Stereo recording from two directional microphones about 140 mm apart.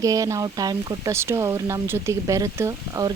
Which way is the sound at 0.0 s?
25° right (ahead or behind).